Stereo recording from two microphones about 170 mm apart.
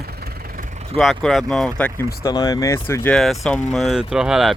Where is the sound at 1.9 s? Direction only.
20° left (ahead or behind).